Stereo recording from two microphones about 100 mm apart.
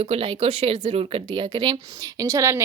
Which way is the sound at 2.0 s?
40° right (ahead or behind).